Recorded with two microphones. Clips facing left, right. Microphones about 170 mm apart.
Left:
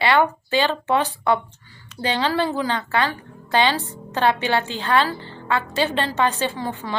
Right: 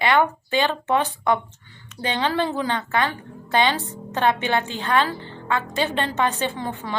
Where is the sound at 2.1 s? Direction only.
20° right (ahead or behind).